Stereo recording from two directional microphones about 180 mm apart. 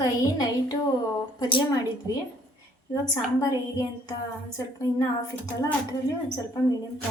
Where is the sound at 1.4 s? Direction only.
30° left (ahead or behind).